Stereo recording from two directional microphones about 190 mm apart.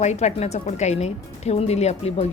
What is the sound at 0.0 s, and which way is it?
A woman's voice, 35° left (ahead or behind).